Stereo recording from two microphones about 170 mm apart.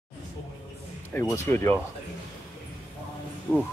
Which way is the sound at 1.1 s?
15° left (ahead or behind).